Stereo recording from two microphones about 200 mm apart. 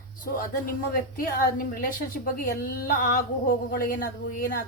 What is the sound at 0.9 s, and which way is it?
A woman's voice, 45° left (ahead or behind).